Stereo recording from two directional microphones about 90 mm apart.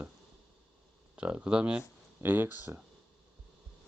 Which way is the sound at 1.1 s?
15° right (ahead or behind).